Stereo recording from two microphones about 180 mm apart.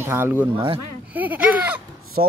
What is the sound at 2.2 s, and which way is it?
Speech, 55° right (ahead or behind).